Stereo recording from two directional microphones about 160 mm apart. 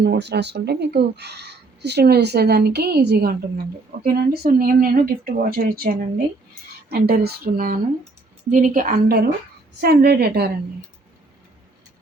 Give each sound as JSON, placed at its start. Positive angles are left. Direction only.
{"t": 0.0, "sound": "speech", "side_deg": -90}
{"t": 4.0, "sound": "a woman's voice", "side_deg": -65}
{"t": 9.8, "sound": "a woman's voice", "side_deg": -85}